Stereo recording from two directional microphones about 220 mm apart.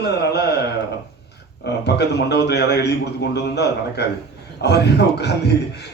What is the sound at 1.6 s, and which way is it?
A man's voice, 50° left (ahead or behind).